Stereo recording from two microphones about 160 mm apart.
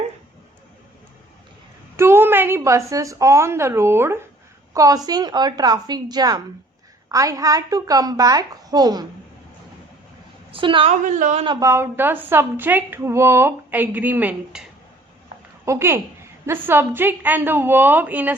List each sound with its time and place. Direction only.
2.0 s a woman's voice: 15° right (ahead or behind)
10.5 s a woman's voice: 35° right (ahead or behind)
11.0 s a woman's voice: 50° right (ahead or behind)
11.4 s a woman's voice: 15° right (ahead or behind)
15.6 s a woman's voice: 15° right (ahead or behind)